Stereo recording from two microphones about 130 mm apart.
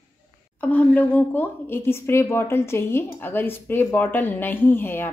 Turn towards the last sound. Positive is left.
turn(degrees=15)  # may be behind; listen again after turning